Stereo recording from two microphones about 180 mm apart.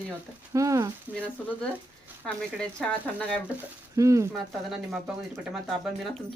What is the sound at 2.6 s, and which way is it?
Speech, 5° left (ahead or behind).